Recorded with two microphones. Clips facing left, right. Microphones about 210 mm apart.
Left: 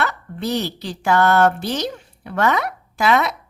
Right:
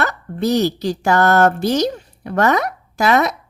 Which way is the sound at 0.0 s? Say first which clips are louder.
Right 4 dB; 40° right (ahead or behind).